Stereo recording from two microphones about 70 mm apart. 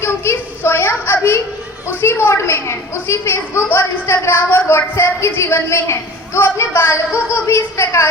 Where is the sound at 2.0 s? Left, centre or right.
Left.